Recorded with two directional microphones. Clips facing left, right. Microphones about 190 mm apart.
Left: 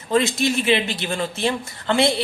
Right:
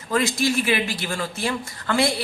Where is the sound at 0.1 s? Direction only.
25° left (ahead or behind).